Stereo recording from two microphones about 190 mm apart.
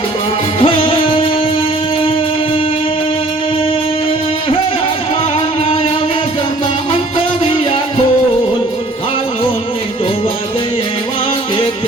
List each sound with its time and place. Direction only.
0.6 s music: 25° left (ahead or behind)